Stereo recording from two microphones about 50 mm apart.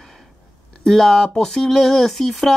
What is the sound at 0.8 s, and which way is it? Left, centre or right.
Speech, centre.